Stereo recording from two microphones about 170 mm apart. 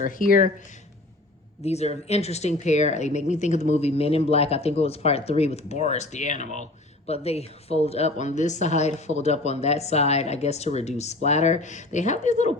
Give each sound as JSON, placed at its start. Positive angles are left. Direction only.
{"t": 0.0, "sound": "speech", "side_deg": 55}
{"t": 1.6, "sound": "speech", "side_deg": 40}